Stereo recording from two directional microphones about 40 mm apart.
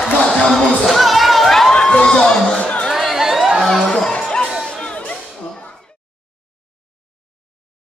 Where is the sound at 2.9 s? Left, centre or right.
Centre.